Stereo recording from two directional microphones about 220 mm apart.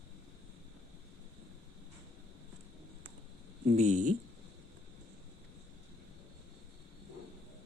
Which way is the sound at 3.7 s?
30° right (ahead or behind).